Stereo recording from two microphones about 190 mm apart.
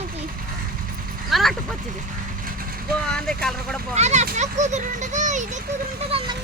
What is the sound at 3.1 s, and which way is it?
Vehicle, 5° left (ahead or behind).